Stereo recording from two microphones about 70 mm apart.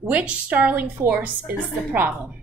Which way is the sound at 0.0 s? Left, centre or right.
Centre.